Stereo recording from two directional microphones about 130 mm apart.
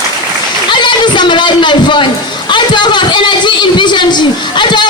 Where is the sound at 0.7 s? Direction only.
35° left (ahead or behind).